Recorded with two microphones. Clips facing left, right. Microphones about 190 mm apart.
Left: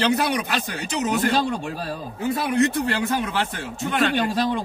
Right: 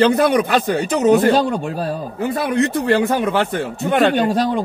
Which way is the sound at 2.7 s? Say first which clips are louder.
Right 7 dB; 60° right (ahead or behind).